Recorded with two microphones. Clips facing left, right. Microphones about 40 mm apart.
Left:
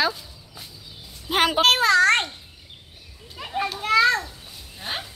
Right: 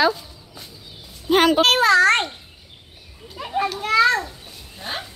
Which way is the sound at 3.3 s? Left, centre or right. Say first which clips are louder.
Right 4 dB; centre.